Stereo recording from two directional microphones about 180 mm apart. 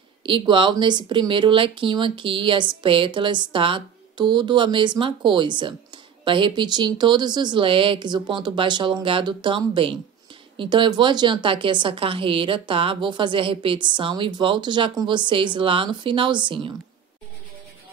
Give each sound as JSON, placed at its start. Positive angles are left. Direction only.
{"t": 0.2, "sound": "speech", "side_deg": -25}